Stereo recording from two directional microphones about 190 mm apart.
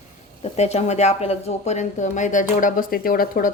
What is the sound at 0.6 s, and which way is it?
Speech, 35° left (ahead or behind).